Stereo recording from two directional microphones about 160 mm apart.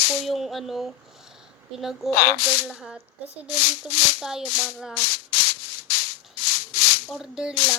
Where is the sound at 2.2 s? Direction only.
80° left.